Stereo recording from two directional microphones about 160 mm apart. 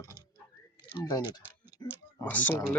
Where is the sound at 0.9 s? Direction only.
25° left (ahead or behind).